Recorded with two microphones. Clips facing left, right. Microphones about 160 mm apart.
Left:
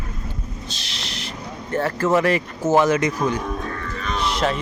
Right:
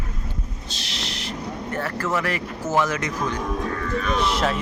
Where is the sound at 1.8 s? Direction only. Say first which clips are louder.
Left 7 dB; 25° left (ahead or behind).